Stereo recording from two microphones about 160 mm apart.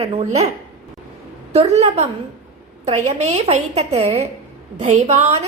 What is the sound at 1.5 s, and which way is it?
A woman's voice, 45° right (ahead or behind).